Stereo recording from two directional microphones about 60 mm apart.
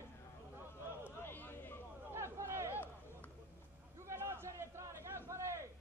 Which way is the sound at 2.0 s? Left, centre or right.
Right.